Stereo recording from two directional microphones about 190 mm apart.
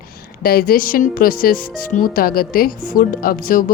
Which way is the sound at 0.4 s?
50° left (ahead or behind).